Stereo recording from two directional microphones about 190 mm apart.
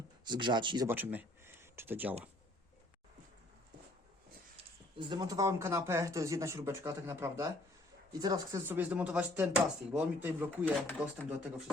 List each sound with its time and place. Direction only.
0.3 s speech: 25° right (ahead or behind)
0.9 s speech: 10° right (ahead or behind)
4.5 s speech: 25° right (ahead or behind); by 11.6 s 5° right (ahead or behind)